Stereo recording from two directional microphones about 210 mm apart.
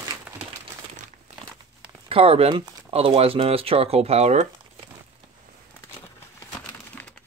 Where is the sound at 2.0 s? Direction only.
25° right (ahead or behind).